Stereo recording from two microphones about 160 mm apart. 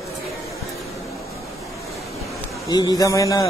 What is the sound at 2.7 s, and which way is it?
Speech, 25° left (ahead or behind).